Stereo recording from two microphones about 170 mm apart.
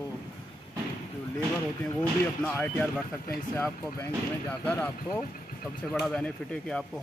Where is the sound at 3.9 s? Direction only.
10° left (ahead or behind).